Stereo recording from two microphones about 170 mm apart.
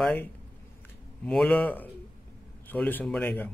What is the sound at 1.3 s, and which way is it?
A man's voice, 5° left (ahead or behind).